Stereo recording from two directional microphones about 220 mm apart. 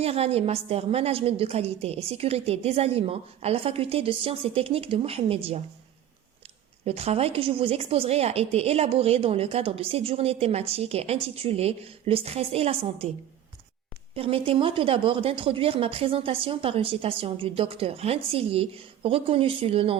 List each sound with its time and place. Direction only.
0.0 s a woman's voice: 25° right (ahead or behind)
6.8 s a woman's voice: 30° right (ahead or behind)
14.2 s a woman's voice: 25° right (ahead or behind)